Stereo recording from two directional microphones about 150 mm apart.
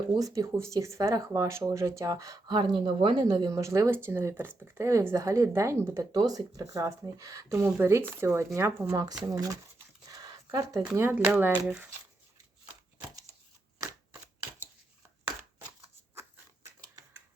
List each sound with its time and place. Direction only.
0.2 s speech: 20° right (ahead or behind)
10.1 s a sound: 25° right (ahead or behind)
10.9 s speech: 15° right (ahead or behind)
13.7 s shuffling cards: 20° right (ahead or behind)